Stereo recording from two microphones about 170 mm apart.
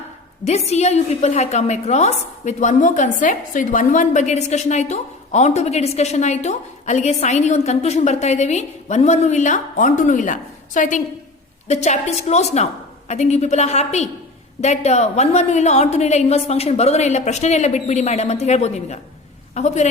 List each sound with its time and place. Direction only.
0.4 s a woman's voice: 40° left (ahead or behind)